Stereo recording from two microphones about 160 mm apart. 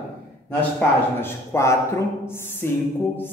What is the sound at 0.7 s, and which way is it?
A man's voice, 15° left (ahead or behind).